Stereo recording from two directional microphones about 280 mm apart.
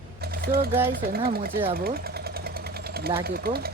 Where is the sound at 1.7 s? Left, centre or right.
Right.